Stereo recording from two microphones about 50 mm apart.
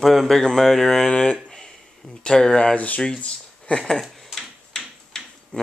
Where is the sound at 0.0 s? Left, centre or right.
Centre.